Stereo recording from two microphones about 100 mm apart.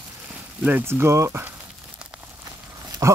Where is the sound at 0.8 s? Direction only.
25° right (ahead or behind).